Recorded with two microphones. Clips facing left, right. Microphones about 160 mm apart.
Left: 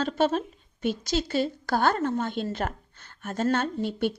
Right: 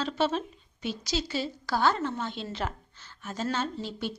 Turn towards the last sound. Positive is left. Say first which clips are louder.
# left 6 dB
turn(degrees=60)  # may be behind; listen again after turning